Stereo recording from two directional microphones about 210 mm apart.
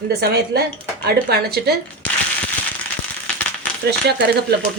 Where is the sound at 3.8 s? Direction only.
50° right (ahead or behind).